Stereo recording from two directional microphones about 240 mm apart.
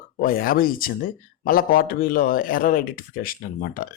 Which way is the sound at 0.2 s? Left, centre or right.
Left.